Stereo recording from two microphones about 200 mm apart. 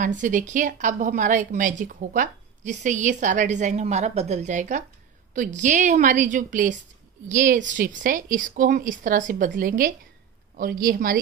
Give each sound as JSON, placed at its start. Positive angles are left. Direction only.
{"t": 0.0, "sound": "a woman's voice", "side_deg": -40}